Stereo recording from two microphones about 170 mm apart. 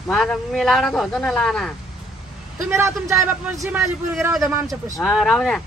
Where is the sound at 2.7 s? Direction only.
15° right (ahead or behind).